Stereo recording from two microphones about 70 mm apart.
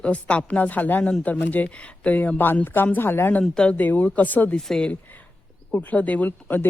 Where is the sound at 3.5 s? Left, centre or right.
Centre.